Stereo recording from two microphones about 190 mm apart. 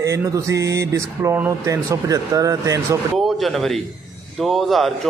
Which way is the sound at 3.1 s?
Centre (ahead or behind).